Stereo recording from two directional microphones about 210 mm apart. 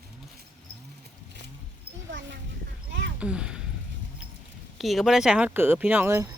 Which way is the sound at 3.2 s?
5° right (ahead or behind).